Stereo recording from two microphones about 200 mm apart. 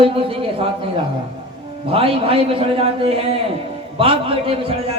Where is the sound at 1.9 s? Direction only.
25° right (ahead or behind).